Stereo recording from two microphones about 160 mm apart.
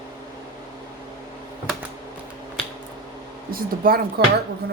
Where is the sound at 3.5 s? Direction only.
65° right (ahead or behind).